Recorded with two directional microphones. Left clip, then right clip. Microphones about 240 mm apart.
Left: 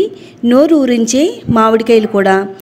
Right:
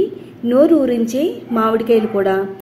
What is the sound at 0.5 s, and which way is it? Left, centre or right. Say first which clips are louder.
A woman's voice: left 3 dB; left.